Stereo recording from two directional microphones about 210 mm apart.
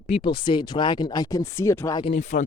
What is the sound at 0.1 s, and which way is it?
Speech, 25° left (ahead or behind).